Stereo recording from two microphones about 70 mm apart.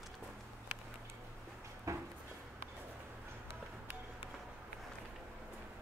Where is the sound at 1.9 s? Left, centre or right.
Right.